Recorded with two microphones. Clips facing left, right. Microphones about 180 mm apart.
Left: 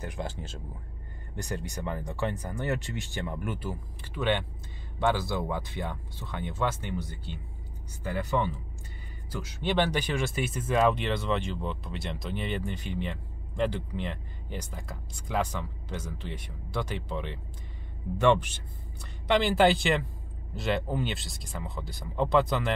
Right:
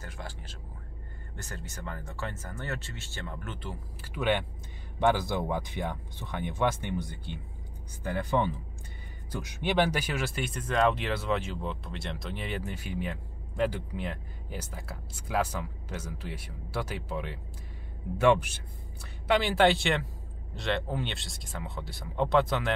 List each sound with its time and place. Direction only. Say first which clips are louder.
0.0 s speech: left 7 dB; 20° left (ahead or behind)
4.0 s speech: even; 10° right (ahead or behind)